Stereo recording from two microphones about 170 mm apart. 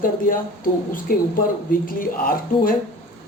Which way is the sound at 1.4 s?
55° left (ahead or behind).